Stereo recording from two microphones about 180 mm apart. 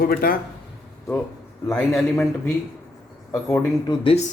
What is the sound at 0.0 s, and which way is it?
Speech, 55° left (ahead or behind).